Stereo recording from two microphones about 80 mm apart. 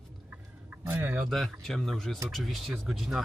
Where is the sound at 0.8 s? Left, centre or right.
Right.